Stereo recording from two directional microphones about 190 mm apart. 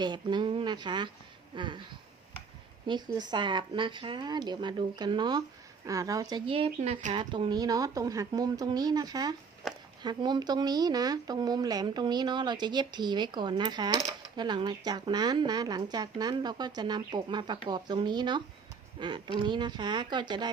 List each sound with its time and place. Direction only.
0.0 s speech: 25° right (ahead or behind)
2.8 s speech: 20° right (ahead or behind)
9.6 s a sound: centre (ahead or behind)
10.0 s speech: 25° right (ahead or behind)